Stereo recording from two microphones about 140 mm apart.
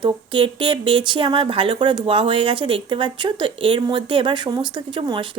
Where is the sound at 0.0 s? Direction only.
35° right (ahead or behind).